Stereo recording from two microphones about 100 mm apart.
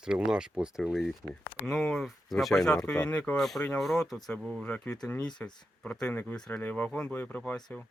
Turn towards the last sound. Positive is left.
turn(degrees=5)  # may be behind; listen again after turning